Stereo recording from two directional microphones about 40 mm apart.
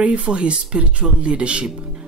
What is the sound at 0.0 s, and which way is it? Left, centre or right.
Speech, right.